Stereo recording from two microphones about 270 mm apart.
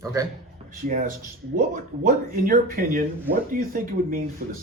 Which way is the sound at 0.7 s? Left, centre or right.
Right.